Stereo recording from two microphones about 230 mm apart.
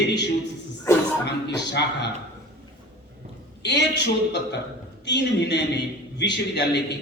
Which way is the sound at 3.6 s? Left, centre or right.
Left.